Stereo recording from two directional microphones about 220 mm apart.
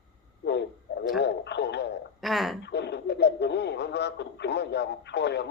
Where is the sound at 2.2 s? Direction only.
Centre (ahead or behind).